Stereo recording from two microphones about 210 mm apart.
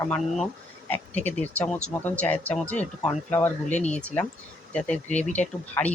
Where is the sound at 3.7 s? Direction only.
35° left (ahead or behind).